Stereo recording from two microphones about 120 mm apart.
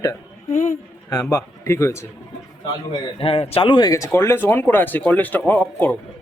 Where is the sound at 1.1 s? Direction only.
25° left (ahead or behind).